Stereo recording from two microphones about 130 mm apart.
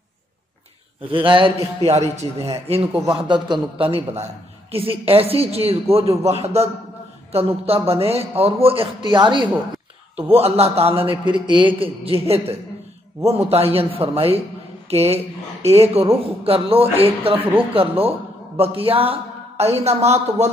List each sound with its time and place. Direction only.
1.0 s a man's voice: 40° right (ahead or behind)
1.9 s a man's voice: 55° right (ahead or behind)
3.1 s a man's voice: 40° right (ahead or behind)
9.1 s a man's voice: 35° right (ahead or behind)
10.3 s a man's voice: 50° right (ahead or behind)